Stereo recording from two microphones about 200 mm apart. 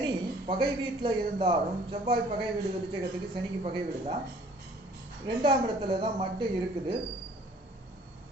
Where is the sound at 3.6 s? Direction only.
25° right (ahead or behind).